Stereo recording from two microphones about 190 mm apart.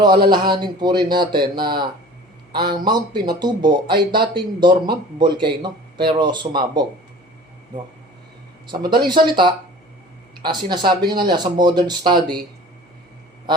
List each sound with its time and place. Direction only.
0.3 s a man's voice: 25° right (ahead or behind)
9.0 s a man's voice: 25° right (ahead or behind)